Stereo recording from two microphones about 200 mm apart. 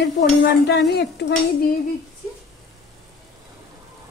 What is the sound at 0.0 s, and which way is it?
A woman's voice, 55° left (ahead or behind).